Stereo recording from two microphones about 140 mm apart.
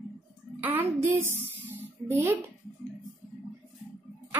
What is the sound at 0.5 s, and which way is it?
Music, 15° right (ahead or behind).